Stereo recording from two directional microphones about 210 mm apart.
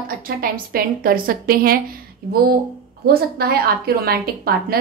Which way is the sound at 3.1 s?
45° right (ahead or behind).